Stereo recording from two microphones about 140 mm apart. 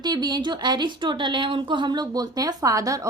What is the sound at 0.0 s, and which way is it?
Speech, 30° right (ahead or behind).